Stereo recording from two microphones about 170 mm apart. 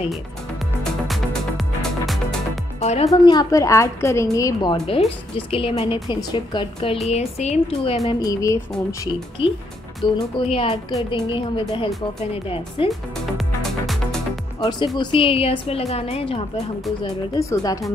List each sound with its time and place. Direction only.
1.0 s music: centre (ahead or behind)
2.8 s a woman's voice: 40° left (ahead or behind)
3.1 s a woman's voice: 20° left (ahead or behind)
8.2 s a woman's voice: 20° left (ahead or behind)
9.4 s a woman's voice: 35° left (ahead or behind)
13.4 s music: centre (ahead or behind)
14.6 s a woman's voice: 25° left (ahead or behind)
17.0 s a woman's voice: 20° left (ahead or behind)